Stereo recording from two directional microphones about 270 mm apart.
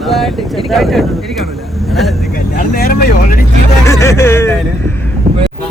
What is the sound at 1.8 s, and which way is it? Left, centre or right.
Vehicle, centre.